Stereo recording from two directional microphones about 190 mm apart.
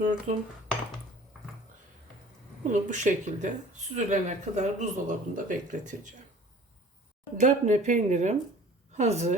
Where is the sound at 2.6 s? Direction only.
40° right (ahead or behind).